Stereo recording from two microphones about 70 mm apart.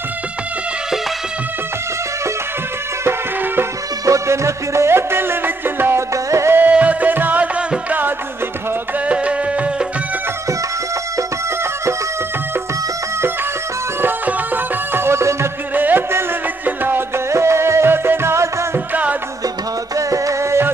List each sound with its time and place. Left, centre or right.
4.0 s music: right
6.6 s music: right
9.0 s music: centre
14.0 s music: right
15.7 s music: right
17.3 s music: right
20.0 s music: right